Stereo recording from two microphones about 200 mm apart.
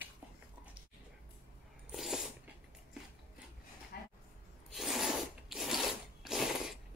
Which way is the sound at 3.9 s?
50° left (ahead or behind).